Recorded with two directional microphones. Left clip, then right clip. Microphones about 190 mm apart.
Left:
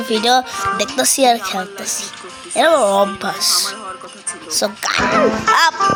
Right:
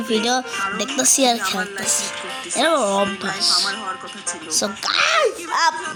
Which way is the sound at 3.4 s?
40° left (ahead or behind).